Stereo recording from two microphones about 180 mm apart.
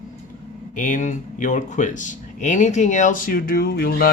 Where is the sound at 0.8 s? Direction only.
45° left (ahead or behind).